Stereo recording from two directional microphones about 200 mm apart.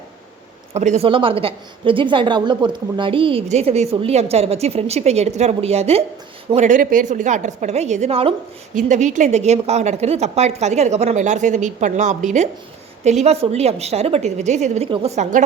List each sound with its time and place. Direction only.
0.7 s a woman's voice: 35° right (ahead or behind)